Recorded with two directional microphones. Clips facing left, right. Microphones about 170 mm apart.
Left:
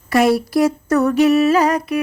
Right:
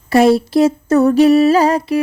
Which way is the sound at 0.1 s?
25° right (ahead or behind).